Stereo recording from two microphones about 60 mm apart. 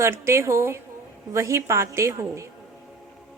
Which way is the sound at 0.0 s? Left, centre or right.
Right.